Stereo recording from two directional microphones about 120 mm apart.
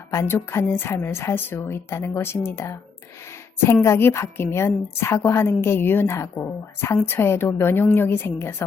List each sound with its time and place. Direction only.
0.1 s a woman's voice: 25° left (ahead or behind)